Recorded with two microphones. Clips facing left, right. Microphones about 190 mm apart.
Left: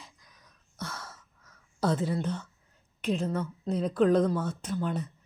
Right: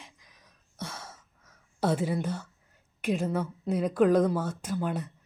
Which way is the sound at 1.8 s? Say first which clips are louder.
Right 1 dB; 10° right (ahead or behind).